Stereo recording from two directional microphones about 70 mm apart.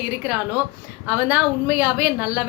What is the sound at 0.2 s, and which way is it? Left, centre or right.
A woman's voice, right.